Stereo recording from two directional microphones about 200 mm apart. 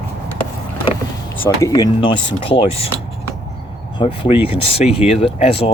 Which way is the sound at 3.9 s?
25° left (ahead or behind).